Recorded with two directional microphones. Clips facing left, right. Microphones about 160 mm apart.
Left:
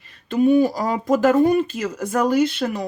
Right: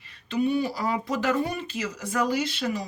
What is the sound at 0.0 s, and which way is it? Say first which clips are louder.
Speech: left 7 dB; 50° left (ahead or behind).